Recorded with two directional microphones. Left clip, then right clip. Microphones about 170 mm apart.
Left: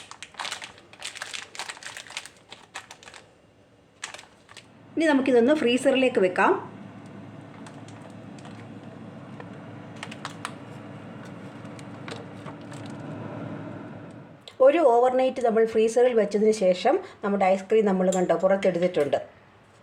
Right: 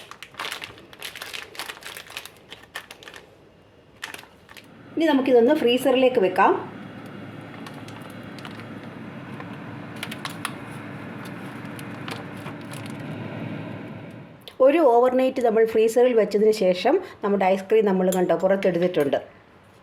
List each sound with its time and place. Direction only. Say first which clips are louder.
4.9 s a woman's voice: right 3 dB; centre (ahead or behind)
14.4 s speech: right 1 dB; 20° right (ahead or behind)